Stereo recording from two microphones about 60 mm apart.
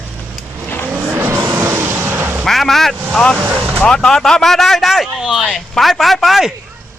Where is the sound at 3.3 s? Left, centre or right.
Right.